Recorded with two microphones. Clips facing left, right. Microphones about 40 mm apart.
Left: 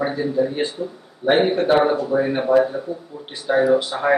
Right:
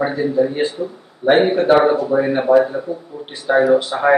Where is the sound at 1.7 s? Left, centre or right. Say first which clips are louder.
Right 5 dB; centre.